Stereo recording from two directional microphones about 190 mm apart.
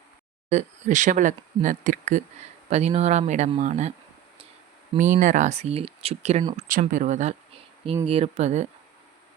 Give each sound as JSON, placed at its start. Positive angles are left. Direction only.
{"t": 0.5, "sound": "speech", "side_deg": -40}
{"t": 4.9, "sound": "speech", "side_deg": -45}
{"t": 6.6, "sound": "speech", "side_deg": -45}